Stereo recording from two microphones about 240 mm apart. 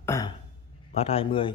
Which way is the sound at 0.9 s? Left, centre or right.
Left.